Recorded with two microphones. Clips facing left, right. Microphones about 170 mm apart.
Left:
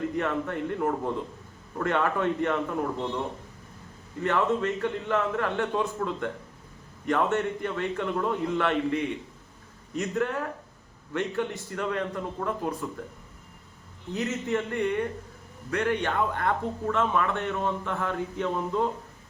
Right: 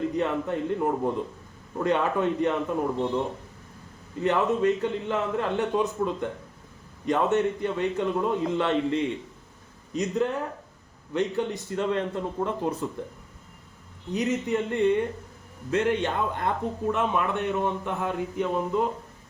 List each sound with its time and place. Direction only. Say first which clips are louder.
0.1 s a man's voice: right 2 dB; 20° right (ahead or behind)
4.2 s a man's voice: right 2 dB; 20° right (ahead or behind)
14.1 s speech: right 2 dB; 15° right (ahead or behind)